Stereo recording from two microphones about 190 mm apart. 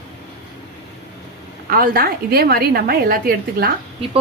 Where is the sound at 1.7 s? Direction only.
50° right (ahead or behind).